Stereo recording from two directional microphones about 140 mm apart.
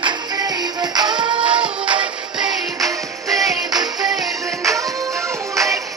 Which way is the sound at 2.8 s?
25° right (ahead or behind).